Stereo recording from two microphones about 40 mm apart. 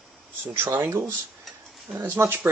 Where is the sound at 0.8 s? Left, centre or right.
Right.